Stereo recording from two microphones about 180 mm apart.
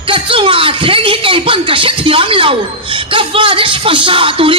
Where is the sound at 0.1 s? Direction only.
30° right (ahead or behind).